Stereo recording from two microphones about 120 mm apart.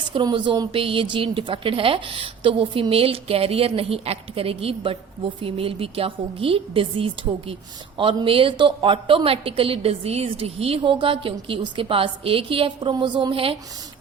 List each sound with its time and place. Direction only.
0.1 s a woman's voice: 40° right (ahead or behind)